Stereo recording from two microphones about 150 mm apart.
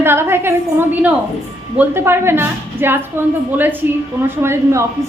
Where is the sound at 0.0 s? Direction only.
15° right (ahead or behind).